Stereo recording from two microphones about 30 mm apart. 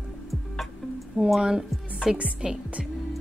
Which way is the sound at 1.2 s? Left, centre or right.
Right.